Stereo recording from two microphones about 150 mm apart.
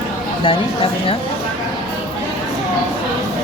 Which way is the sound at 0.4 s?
35° left (ahead or behind).